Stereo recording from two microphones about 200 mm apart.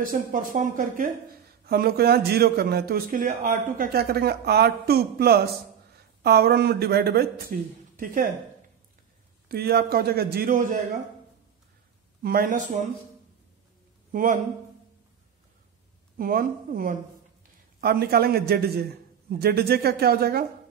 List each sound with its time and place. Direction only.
0.3 s speech: 40° right (ahead or behind)
1.7 s a man's voice: 50° right (ahead or behind)
9.5 s a man's voice: 50° right (ahead or behind)
12.2 s a man's voice: 45° right (ahead or behind)
14.1 s a man's voice: 45° right (ahead or behind)
16.2 s a man's voice: 45° right (ahead or behind)